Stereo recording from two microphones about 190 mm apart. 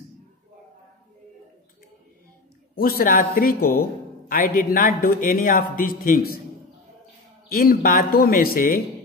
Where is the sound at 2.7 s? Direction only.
50° left (ahead or behind).